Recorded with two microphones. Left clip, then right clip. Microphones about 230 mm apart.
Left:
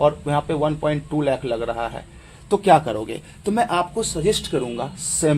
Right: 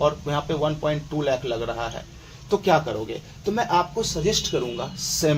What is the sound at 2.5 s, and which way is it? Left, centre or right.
Speech, left.